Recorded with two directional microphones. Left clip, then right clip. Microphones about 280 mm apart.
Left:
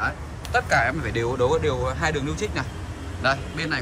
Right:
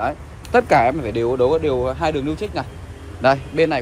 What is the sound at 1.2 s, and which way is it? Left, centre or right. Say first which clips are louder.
Speech: right 5 dB; centre.